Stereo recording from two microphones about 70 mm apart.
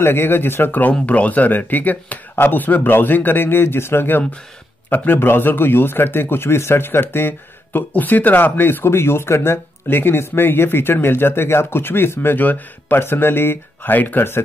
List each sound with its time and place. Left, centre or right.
0.0 s a man's voice: left